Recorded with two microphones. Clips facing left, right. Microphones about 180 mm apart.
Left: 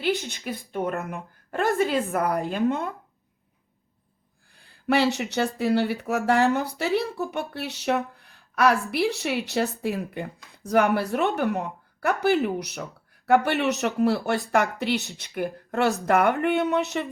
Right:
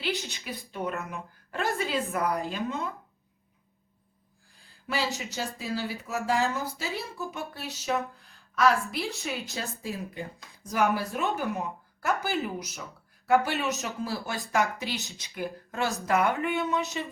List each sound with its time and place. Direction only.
0.2 s speech: 55° left (ahead or behind)
4.6 s a sound: 60° left (ahead or behind)
5.1 s speech: 65° left (ahead or behind)